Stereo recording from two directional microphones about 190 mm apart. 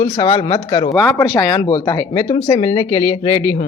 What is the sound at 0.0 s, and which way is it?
Speech, 30° left (ahead or behind).